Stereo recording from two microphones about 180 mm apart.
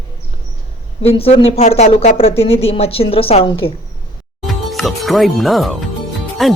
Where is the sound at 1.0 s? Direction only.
35° left (ahead or behind).